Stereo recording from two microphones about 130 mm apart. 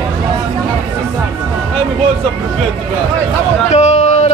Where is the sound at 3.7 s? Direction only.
60° left (ahead or behind).